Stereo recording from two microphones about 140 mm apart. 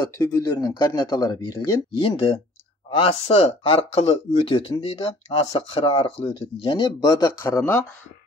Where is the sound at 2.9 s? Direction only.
45° left (ahead or behind); by 7.5 s 25° left (ahead or behind).